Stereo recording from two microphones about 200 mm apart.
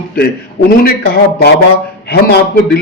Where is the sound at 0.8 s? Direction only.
50° left (ahead or behind).